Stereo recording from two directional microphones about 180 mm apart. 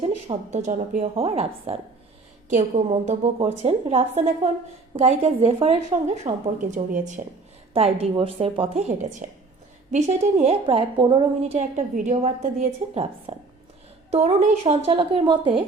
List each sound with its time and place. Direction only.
0.0 s a woman's voice: 35° right (ahead or behind)
7.7 s a woman's voice: 30° right (ahead or behind)